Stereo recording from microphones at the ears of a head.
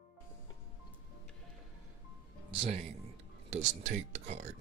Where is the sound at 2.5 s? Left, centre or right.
Right.